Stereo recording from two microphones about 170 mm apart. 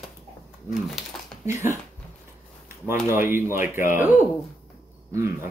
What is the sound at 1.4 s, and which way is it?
Speech, 15° right (ahead or behind).